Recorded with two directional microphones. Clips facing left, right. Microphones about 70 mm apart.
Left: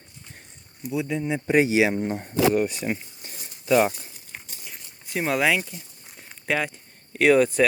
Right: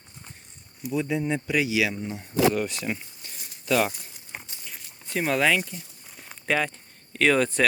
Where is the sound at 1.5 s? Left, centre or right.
Left.